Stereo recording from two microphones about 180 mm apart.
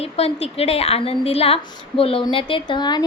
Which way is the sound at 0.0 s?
35° left (ahead or behind).